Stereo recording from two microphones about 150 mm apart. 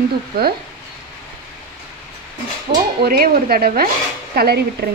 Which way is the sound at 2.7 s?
85° right.